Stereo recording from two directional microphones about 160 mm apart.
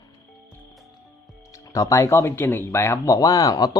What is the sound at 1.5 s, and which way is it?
Speech, 20° left (ahead or behind).